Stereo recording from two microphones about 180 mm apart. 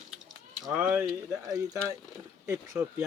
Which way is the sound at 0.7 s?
10° right (ahead or behind).